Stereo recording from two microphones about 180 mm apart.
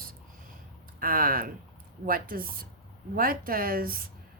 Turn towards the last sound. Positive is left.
turn(degrees=-55)  # may be behind; listen again after turning